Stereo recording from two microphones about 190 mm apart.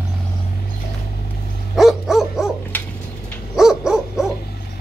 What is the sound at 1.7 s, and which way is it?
Dog, centre (ahead or behind).